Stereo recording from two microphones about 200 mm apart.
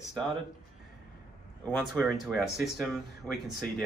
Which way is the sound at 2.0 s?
Centre (ahead or behind).